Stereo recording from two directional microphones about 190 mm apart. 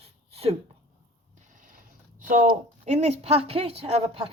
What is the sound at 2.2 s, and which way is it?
A woman's voice, 45° right (ahead or behind).